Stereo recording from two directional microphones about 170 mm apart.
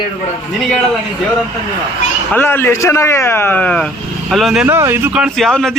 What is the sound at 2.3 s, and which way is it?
A man's voice, 10° left (ahead or behind).